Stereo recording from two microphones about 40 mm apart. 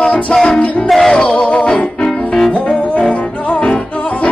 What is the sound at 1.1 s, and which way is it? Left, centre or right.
Music, centre.